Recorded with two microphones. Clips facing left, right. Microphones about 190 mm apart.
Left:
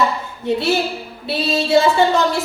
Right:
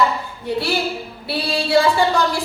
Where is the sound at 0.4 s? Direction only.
20° left (ahead or behind).